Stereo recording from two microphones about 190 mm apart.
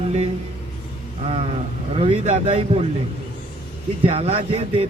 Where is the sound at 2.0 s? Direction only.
35° right (ahead or behind).